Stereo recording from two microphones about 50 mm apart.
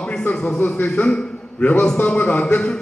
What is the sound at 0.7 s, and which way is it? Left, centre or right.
A man's voice, left.